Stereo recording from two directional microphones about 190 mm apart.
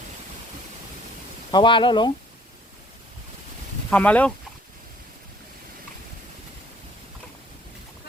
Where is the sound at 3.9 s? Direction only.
5° left (ahead or behind).